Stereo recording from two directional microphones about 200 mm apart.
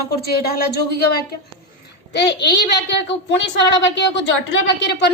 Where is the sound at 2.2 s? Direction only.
55° left (ahead or behind).